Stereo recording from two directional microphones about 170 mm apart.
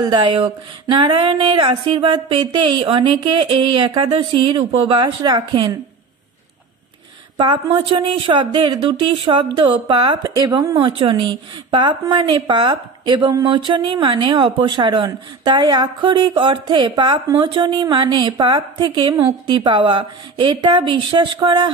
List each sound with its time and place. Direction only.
0.0 s speech: 25° right (ahead or behind)
7.3 s speech: 30° right (ahead or behind)